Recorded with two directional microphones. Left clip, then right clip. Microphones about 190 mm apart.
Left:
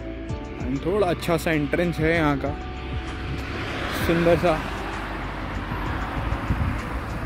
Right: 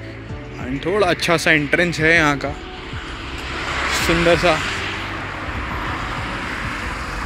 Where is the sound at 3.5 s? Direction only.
60° left (ahead or behind).